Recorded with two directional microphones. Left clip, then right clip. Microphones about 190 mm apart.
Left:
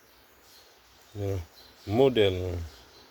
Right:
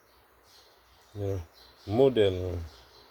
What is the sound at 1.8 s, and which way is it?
Speech, 5° right (ahead or behind).